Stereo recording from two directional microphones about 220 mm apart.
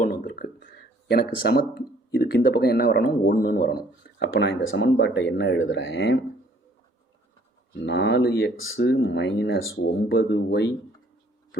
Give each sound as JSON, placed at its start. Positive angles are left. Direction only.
{"t": 0.0, "sound": "a sound", "side_deg": 40}
{"t": 2.1, "sound": "speech", "side_deg": 45}
{"t": 7.9, "sound": "speech", "side_deg": 50}
{"t": 8.8, "sound": "speech", "side_deg": 50}